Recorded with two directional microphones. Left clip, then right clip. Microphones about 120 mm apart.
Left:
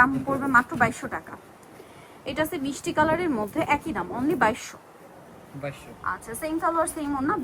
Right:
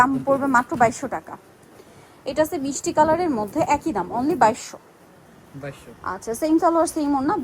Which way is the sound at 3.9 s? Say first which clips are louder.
Right 4 dB; 45° right (ahead or behind).